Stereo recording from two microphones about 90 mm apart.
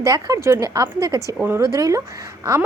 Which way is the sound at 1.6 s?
40° right (ahead or behind).